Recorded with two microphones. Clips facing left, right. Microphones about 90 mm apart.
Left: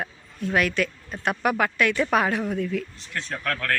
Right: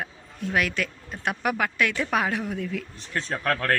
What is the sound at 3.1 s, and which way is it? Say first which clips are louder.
Speech: right 4 dB; 30° right (ahead or behind).